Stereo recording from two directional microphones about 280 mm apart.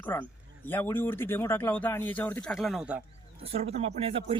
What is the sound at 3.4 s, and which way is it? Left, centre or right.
Speech, right.